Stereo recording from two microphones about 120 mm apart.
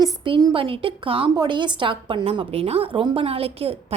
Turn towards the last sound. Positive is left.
turn(degrees=-55)  # may be behind; listen again after turning